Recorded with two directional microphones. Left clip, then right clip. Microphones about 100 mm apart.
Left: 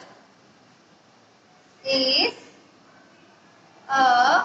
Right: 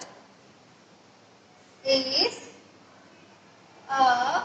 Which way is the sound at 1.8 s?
30° left (ahead or behind).